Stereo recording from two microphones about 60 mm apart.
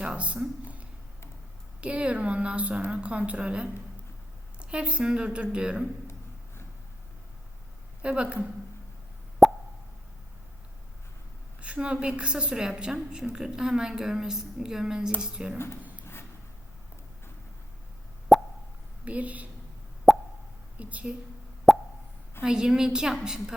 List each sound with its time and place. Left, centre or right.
0.0 s a sound: centre
1.8 s a woman's voice: centre
8.0 s a woman's voice: centre
9.4 s plop: centre
11.6 s a woman's voice: centre
15.5 s speech: left
18.3 s plop: centre
19.0 s a woman's voice: right
20.1 s plop: centre
20.7 s a woman's voice: right
21.7 s plop: centre
22.4 s a woman's voice: centre